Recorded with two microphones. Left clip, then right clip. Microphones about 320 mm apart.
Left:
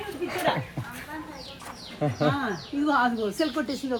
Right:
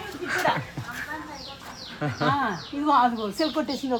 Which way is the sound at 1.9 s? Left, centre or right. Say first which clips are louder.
Left 2 dB; centre.